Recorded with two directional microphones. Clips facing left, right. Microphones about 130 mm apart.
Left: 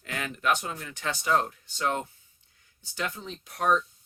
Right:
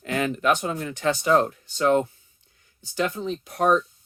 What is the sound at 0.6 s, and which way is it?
Speech, 40° right (ahead or behind).